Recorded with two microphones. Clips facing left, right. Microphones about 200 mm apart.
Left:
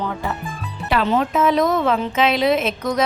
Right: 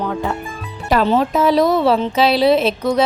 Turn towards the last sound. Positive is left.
turn(degrees=-30)  # may be behind; listen again after turning